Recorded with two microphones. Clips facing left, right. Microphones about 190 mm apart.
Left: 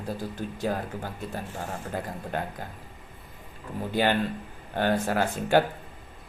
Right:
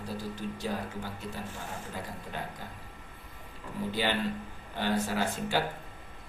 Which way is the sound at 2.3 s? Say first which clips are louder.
Left 8 dB; 50° left (ahead or behind).